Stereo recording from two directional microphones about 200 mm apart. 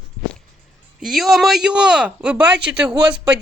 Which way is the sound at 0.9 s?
Centre (ahead or behind).